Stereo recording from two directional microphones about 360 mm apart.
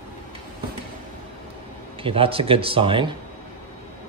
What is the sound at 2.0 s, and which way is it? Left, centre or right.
Speech, centre.